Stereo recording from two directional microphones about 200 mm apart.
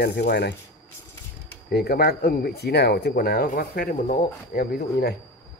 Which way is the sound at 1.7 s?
50° left (ahead or behind).